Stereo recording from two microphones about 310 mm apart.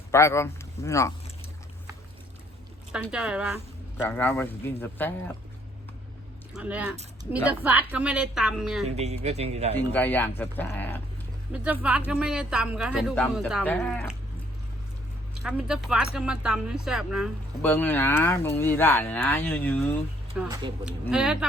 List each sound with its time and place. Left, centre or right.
0.1 s speech: centre
2.9 s speech: centre
3.9 s speech: centre
6.5 s speech: centre
9.0 s a man's voice: right
9.7 s speech: centre
11.5 s speech: centre
15.4 s speech: centre
20.4 s speech: centre